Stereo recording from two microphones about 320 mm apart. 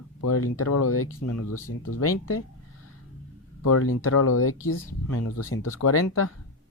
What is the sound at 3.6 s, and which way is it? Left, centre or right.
Speech, left.